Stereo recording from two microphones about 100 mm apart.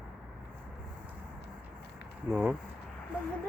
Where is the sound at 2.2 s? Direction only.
10° right (ahead or behind).